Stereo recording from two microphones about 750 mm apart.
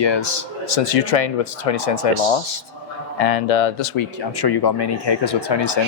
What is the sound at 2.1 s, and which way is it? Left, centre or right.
Speech, right.